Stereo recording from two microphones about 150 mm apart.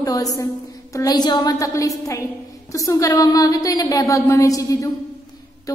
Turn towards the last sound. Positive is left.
turn(degrees=20)  # may be behind; listen again after turning